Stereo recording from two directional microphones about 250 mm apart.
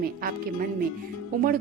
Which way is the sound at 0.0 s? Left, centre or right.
Right.